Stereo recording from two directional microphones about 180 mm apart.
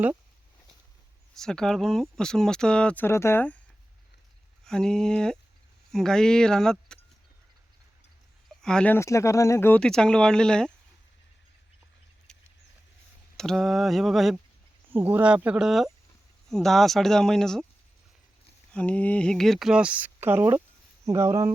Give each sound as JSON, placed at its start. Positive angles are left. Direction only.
{"t": 1.4, "sound": "speech", "side_deg": 5}
{"t": 4.6, "sound": "speech", "side_deg": 5}
{"t": 8.4, "sound": "speech", "side_deg": 5}
{"t": 12.3, "sound": "a sound", "side_deg": 5}
{"t": 13.3, "sound": "speech", "side_deg": 5}
{"t": 18.7, "sound": "speech", "side_deg": 5}